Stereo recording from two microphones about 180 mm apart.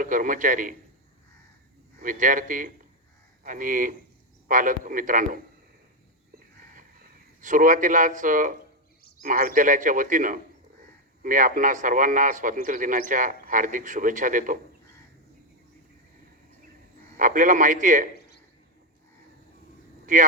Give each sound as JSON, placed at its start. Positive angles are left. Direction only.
{"t": 0.0, "sound": "a man's voice", "side_deg": -50}
{"t": 2.0, "sound": "a man's voice", "side_deg": -45}
{"t": 7.4, "sound": "a man's voice", "side_deg": -45}
{"t": 17.2, "sound": "a man's voice", "side_deg": -45}